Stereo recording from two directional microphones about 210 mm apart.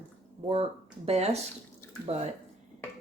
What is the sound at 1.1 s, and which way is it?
Speech, 30° right (ahead or behind).